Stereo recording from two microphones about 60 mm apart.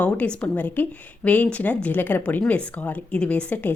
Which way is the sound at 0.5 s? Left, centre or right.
Left.